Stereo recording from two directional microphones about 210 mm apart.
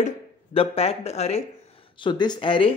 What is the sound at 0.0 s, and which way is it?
Speech, 30° left (ahead or behind).